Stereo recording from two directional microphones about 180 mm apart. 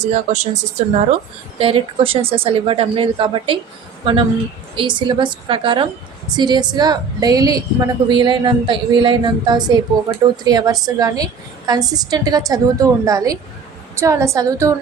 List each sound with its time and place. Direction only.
0.0 s a woman's voice: 40° right (ahead or behind); by 14.8 s 15° right (ahead or behind)